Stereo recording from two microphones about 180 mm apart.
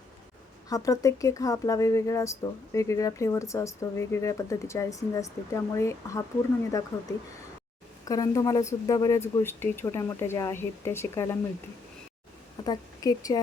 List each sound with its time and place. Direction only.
0.7 s speech: 20° left (ahead or behind)
8.0 s speech: 20° left (ahead or behind)
12.6 s speech: 20° left (ahead or behind)